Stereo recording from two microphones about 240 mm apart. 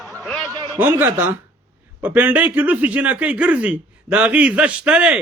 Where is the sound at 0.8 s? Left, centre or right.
Centre.